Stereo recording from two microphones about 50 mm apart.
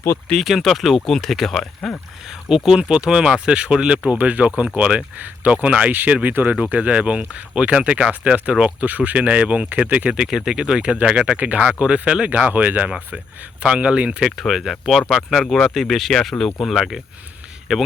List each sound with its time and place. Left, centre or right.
0.4 s speech: centre
2.5 s speech: centre
10.2 s speech: centre; by 11.5 s right
11.5 s speech: centre; by 12.9 s right
13.1 s speech: centre
14.2 s speech: centre